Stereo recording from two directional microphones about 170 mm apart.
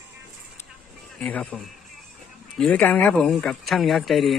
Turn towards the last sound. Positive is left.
turn(degrees=0)  # may be behind; listen again after turning